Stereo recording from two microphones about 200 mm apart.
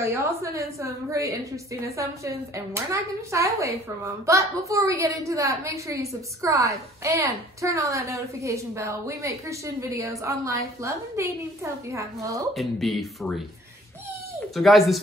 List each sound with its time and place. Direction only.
0.1 s a woman's voice: 15° right (ahead or behind)
12.5 s speech: centre (ahead or behind)
14.5 s speech: centre (ahead or behind)